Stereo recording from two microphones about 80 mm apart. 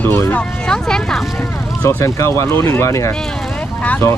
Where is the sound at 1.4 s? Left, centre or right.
Left.